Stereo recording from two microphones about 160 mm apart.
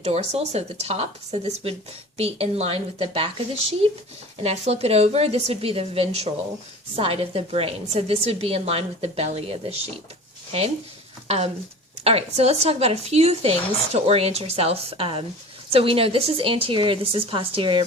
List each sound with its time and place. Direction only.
0.0 s a woman's voice: 40° right (ahead or behind)
11.3 s a woman's voice: 40° right (ahead or behind)